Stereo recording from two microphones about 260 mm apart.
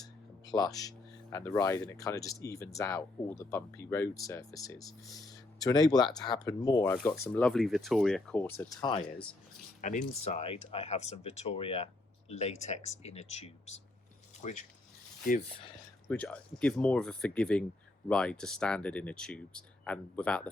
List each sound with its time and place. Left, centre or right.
0.0 s a sound: centre
1.8 s speech: centre; by 15.4 s left
16.0 s speech: centre